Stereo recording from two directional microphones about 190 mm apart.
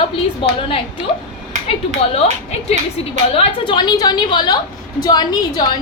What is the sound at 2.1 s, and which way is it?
A woman's voice, 30° left (ahead or behind).